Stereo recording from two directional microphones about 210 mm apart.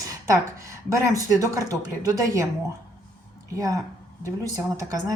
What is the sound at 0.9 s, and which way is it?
Speech, 15° right (ahead or behind).